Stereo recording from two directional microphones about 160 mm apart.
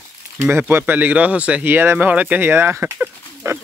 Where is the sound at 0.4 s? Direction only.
15° right (ahead or behind).